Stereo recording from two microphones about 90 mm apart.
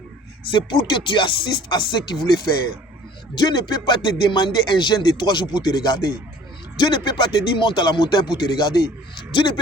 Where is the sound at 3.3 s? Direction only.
55° left (ahead or behind).